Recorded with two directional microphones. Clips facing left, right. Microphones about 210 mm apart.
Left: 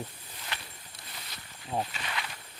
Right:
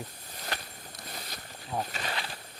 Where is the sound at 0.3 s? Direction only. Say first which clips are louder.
Right 4 dB; 40° right (ahead or behind).